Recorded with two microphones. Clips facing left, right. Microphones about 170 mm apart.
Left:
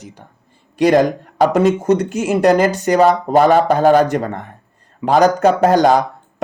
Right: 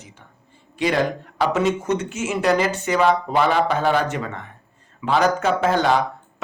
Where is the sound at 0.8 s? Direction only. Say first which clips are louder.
Left 8 dB; 45° left (ahead or behind).